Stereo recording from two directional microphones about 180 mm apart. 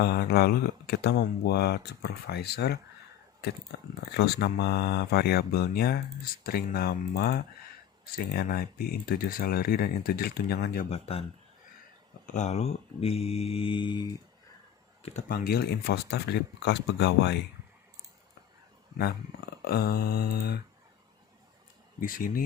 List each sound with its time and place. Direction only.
0.0 s speech: 65° left (ahead or behind)
4.2 s speech: 65° left (ahead or behind)
10.8 s speech: 35° left (ahead or behind)
15.3 s speech: 55° left (ahead or behind); by 17.3 s 75° left (ahead or behind)
19.6 s speech: 60° left (ahead or behind)
22.0 s speech: 50° left (ahead or behind)